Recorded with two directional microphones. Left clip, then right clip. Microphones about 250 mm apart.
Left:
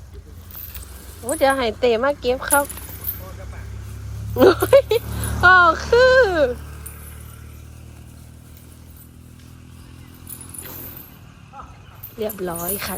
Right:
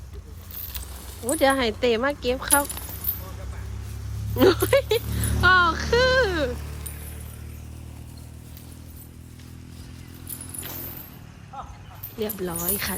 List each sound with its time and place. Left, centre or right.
1.2 s speech: centre
4.4 s speech: centre
6.6 s a sound: left
12.2 s speech: centre